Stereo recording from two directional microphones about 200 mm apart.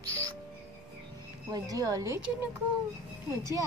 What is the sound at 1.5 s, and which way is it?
Speech, 15° right (ahead or behind).